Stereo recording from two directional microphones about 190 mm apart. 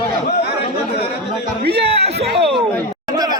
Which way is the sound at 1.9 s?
30° right (ahead or behind).